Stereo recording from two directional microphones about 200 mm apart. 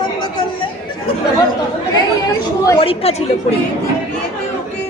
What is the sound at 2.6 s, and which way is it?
Speech, 20° left (ahead or behind).